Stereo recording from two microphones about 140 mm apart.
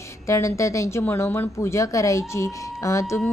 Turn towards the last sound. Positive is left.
turn(degrees=20)  # may be behind; listen again after turning